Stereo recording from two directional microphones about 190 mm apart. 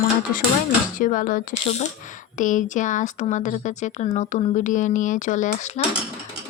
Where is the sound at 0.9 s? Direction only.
45° left (ahead or behind).